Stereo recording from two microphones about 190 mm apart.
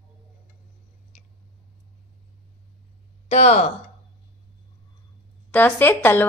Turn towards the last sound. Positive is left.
turn(degrees=10)  # may be behind; listen again after turning